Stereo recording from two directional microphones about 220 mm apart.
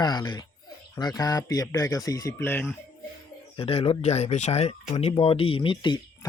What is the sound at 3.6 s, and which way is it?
Speech, 25° left (ahead or behind).